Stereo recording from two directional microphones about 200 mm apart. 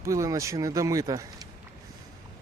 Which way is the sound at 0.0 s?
15° right (ahead or behind).